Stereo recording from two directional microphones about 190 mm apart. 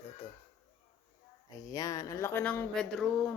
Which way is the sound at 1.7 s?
20° left (ahead or behind).